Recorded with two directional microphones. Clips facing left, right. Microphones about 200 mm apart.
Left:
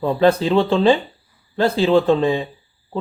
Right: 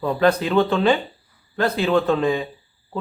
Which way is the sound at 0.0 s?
30° left (ahead or behind).